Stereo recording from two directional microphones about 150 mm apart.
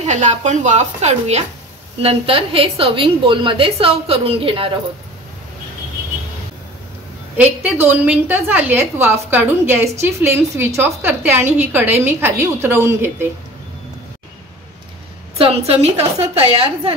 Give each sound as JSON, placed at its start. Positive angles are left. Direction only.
{"t": 0.0, "sound": "a woman's voice", "side_deg": -55}
{"t": 7.6, "sound": "a woman's voice", "side_deg": -15}
{"t": 15.3, "sound": "a woman's voice", "side_deg": -40}